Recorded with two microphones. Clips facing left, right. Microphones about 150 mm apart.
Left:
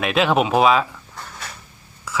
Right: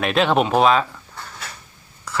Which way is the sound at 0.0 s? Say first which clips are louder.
Even; centre (ahead or behind).